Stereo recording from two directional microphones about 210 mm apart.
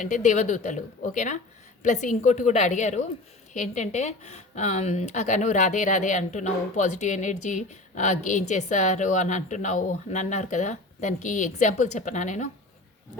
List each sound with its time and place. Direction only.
0.0 s speech: 35° left (ahead or behind)